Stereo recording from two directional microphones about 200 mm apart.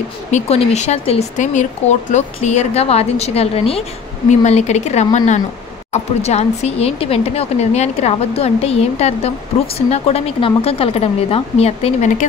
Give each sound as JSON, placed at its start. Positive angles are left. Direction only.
{"t": 0.3, "sound": "speech", "side_deg": 35}